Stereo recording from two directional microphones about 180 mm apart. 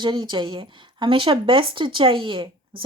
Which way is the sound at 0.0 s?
25° right (ahead or behind).